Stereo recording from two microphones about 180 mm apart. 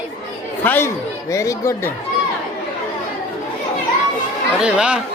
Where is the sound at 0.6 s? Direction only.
10° left (ahead or behind).